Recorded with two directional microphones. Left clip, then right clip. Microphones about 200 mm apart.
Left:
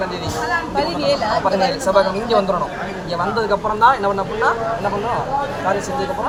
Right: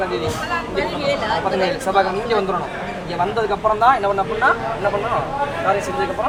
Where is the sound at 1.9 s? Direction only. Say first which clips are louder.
Left 2 dB; 10° right (ahead or behind).